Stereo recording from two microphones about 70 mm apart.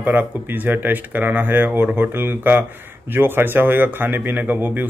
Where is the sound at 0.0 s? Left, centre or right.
Right.